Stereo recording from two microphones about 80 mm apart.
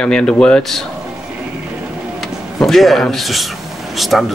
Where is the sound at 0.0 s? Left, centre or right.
Centre.